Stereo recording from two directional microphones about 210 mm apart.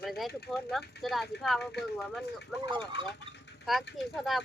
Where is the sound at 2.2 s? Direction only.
55° left (ahead or behind).